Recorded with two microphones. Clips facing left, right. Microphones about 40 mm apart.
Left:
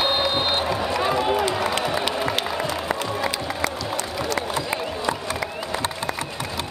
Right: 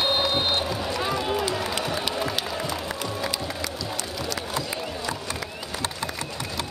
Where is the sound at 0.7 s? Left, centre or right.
Left.